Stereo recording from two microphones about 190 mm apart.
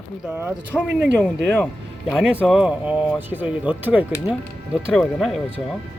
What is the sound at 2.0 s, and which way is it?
Speech, 5° right (ahead or behind).